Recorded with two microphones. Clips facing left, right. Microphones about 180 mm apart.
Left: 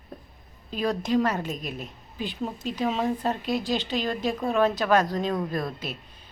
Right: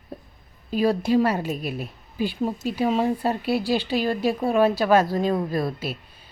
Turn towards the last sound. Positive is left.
turn(degrees=-5)  # may be behind; listen again after turning